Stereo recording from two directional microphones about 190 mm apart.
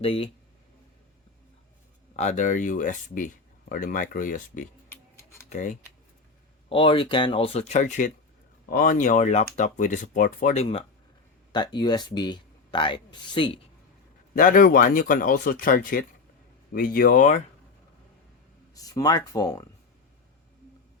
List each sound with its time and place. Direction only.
0.0 s speech: 30° left (ahead or behind)
2.1 s speech: 40° left (ahead or behind)
5.1 s tick-tock: 15° left (ahead or behind)
5.5 s speech: 40° left (ahead or behind)
6.7 s speech: 30° left (ahead or behind)
14.3 s speech: 50° left (ahead or behind)
18.7 s speech: 20° left (ahead or behind)